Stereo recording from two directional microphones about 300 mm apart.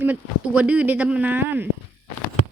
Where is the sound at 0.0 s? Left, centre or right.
Centre.